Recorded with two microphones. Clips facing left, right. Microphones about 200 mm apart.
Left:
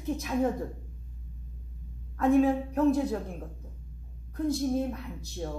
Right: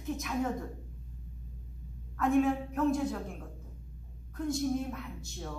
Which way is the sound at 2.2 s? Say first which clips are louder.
Left 4 dB; 35° left (ahead or behind).